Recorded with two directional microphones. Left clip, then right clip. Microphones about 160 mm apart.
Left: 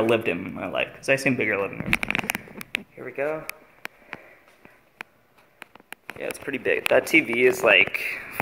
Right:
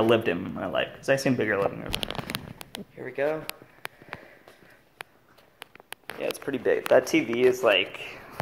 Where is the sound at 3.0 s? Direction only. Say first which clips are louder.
Right 2 dB; 15° left (ahead or behind).